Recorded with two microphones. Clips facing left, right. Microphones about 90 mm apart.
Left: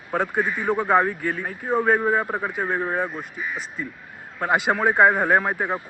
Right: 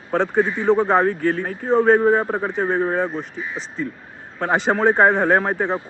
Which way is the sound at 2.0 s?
20° right (ahead or behind).